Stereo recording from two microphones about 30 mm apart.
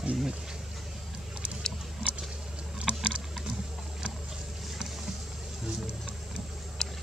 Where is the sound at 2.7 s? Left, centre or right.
Right.